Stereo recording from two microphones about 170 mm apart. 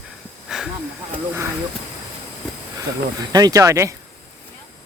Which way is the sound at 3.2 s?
20° right (ahead or behind).